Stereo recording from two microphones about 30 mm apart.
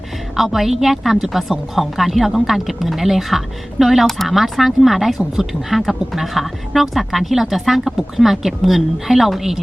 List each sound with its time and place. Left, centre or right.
0.3 s speech: centre